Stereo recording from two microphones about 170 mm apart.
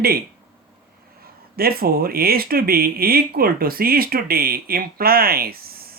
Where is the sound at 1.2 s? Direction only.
60° right (ahead or behind).